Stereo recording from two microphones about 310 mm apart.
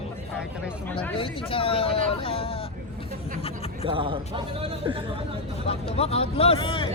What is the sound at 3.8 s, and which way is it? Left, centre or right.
Speech, centre.